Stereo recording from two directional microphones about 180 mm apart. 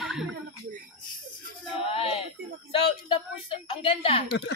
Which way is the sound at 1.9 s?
30° left (ahead or behind).